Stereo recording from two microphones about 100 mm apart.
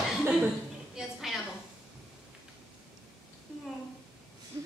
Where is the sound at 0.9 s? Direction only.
Centre (ahead or behind).